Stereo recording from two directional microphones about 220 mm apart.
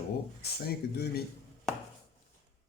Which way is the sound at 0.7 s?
45° left (ahead or behind).